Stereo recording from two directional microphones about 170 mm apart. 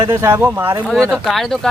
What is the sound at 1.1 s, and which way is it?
Speech, centre (ahead or behind).